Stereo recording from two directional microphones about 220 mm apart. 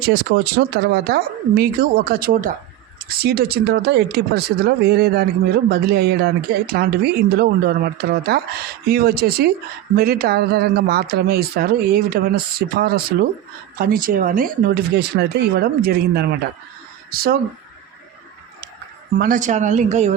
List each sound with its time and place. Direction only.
0.3 s speech: 50° right (ahead or behind)
19.2 s speech: 35° right (ahead or behind)